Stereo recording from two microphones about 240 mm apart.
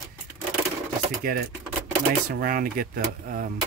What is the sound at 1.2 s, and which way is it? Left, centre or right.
Speech, right.